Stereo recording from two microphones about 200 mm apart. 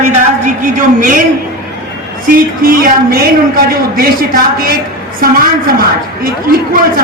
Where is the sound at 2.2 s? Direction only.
45° right (ahead or behind).